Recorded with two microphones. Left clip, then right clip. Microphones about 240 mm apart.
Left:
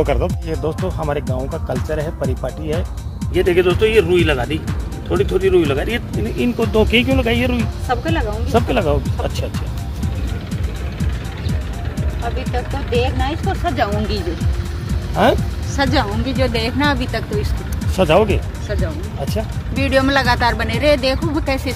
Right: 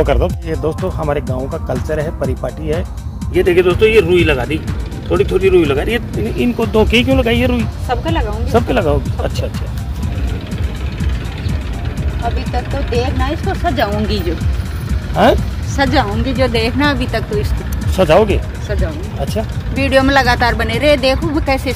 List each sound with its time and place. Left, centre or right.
0.0 s speech: centre
10.5 s music: centre
13.0 s speech: centre
14.1 s speech: centre